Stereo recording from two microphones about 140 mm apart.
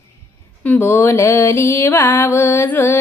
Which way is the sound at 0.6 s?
15° left (ahead or behind).